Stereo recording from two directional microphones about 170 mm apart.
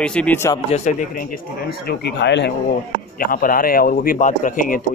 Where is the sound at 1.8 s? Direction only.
80° left.